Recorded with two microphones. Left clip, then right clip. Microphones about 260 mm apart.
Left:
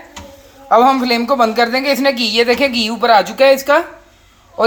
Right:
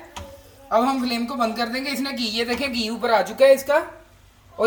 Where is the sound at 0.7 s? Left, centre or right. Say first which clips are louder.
Left 10 dB; left.